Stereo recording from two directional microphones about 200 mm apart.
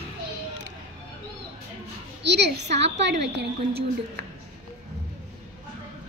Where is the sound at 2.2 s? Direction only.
55° right (ahead or behind).